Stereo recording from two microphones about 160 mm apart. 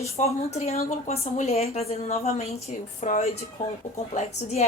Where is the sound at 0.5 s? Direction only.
40° left (ahead or behind).